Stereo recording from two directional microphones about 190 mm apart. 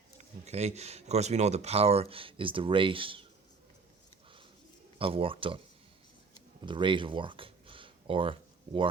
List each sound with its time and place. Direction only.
0.2 s speech: 35° right (ahead or behind)
4.9 s speech: 30° right (ahead or behind)
6.7 s speech: 25° right (ahead or behind)